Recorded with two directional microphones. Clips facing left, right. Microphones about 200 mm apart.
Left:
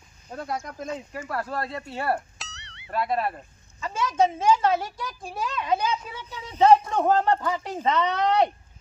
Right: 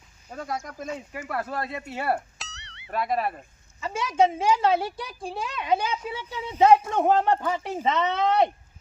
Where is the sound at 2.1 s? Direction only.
Centre (ahead or behind).